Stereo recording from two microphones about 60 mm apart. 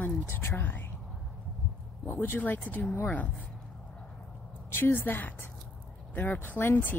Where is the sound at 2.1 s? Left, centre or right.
Left.